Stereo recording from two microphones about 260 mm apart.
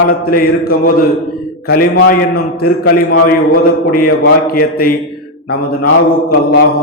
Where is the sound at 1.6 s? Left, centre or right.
Left.